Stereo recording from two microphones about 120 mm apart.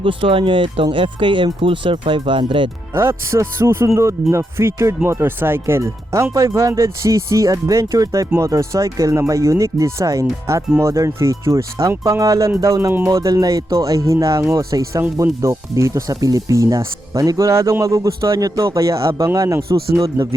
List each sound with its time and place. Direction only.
0.0 s speech: 45° right (ahead or behind)
2.9 s speech: 25° right (ahead or behind)